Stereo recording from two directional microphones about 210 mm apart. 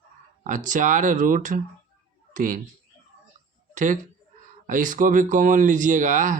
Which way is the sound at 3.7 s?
35° right (ahead or behind).